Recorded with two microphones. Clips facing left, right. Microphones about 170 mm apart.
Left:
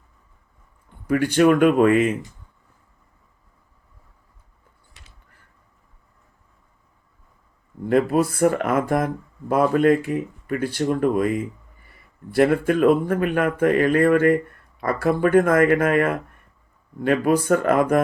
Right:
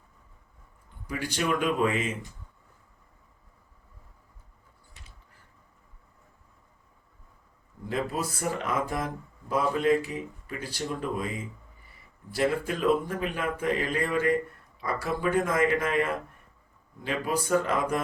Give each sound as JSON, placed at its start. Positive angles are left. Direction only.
{"t": 1.0, "sound": "speech", "side_deg": 60}
{"t": 7.9, "sound": "speech", "side_deg": 60}